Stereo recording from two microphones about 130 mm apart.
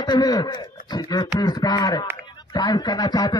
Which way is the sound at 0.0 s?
30° left (ahead or behind).